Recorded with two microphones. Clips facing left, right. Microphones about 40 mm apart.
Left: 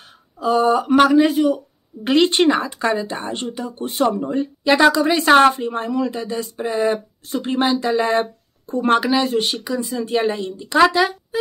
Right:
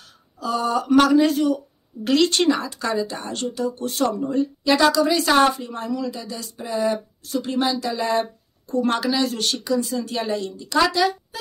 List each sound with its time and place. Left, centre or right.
0.4 s speech: left